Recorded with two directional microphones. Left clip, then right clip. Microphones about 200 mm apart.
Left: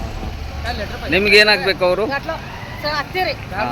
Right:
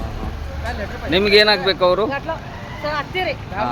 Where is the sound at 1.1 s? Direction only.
Centre (ahead or behind).